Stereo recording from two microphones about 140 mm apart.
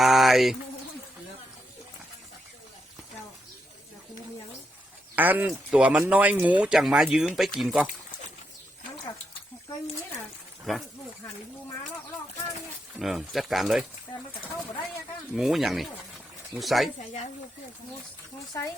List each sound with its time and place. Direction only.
0.0 s speech: centre (ahead or behind)
5.1 s speech: 10° right (ahead or behind)
10.6 s speech: centre (ahead or behind)
13.0 s speech: centre (ahead or behind)
15.4 s speech: centre (ahead or behind)
17.0 s speech: 60° left (ahead or behind)
18.5 s speech: 20° left (ahead or behind)